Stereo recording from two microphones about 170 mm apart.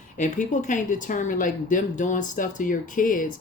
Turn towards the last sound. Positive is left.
turn(degrees=55)  # may be behind; listen again after turning